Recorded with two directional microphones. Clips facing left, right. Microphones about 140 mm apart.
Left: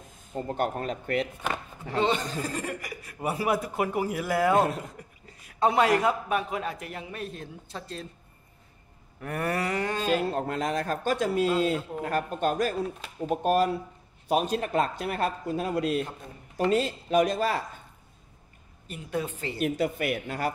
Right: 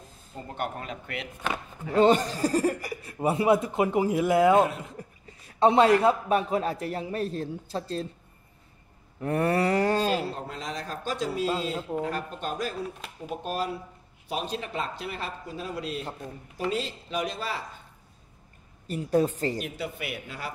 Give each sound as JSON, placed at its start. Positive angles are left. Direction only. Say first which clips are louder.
{"t": 0.3, "sound": "speech", "louder": "left 5 dB", "side_deg": 40}
{"t": 1.9, "sound": "speech", "louder": "right 6 dB", "side_deg": -40}
{"t": 5.0, "sound": "a sound", "louder": "right 5 dB", "side_deg": -30}
{"t": 5.5, "sound": "a man's voice", "louder": "right 3 dB", "side_deg": -25}
{"t": 9.2, "sound": "a man's voice", "louder": "right 5 dB", "side_deg": -25}
{"t": 10.1, "sound": "speech", "louder": "left 4 dB", "side_deg": 60}
{"t": 18.9, "sound": "a man's voice", "louder": "right 8 dB", "side_deg": -40}
{"t": 19.6, "sound": "speech", "louder": "left 8 dB", "side_deg": 50}